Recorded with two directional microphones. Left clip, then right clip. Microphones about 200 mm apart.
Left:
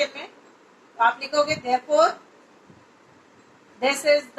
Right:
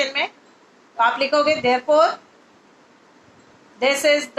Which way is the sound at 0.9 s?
35° right (ahead or behind).